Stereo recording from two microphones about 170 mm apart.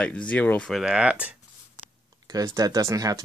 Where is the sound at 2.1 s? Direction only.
20° right (ahead or behind).